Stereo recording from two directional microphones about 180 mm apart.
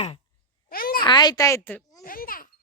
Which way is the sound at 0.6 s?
55° left (ahead or behind).